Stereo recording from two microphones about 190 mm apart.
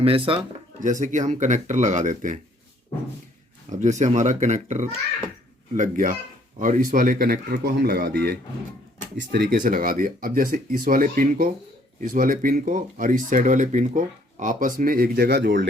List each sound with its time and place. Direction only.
0.0 s speech: 30° right (ahead or behind)
0.8 s speech: 40° right (ahead or behind)
3.7 s speech: 40° right (ahead or behind)